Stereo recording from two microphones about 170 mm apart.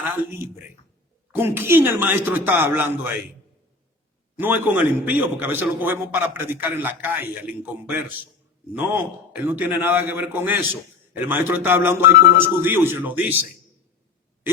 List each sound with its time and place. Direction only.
0.0 s a man's voice: 10° right (ahead or behind)
4.4 s a man's voice: 10° right (ahead or behind)